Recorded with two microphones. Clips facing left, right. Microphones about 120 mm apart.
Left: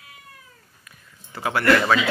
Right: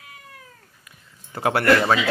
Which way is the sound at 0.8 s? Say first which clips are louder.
Left 1 dB; 15° right (ahead or behind).